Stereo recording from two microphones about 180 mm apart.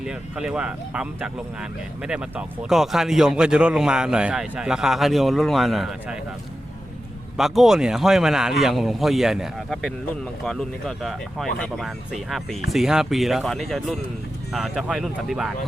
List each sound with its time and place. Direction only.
0.0 s speech: 5° right (ahead or behind)
7.3 s speech: centre (ahead or behind)